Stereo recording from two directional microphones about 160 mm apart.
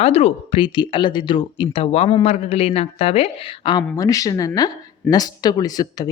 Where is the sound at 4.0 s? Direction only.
20° left (ahead or behind).